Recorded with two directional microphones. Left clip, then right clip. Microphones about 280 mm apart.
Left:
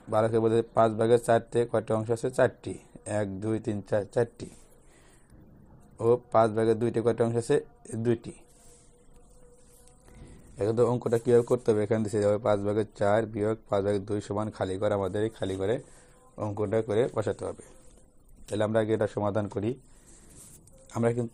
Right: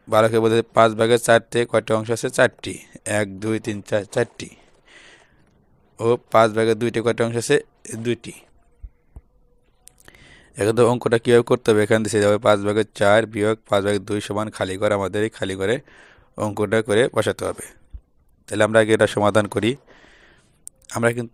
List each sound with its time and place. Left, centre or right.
0.1 s a man's voice: right
6.0 s a man's voice: right
10.8 s a man's voice: right
13.0 s a man's voice: right
18.9 s a man's voice: right
20.9 s a man's voice: right